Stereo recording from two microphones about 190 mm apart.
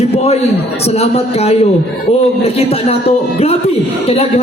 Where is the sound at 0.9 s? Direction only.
35° left (ahead or behind).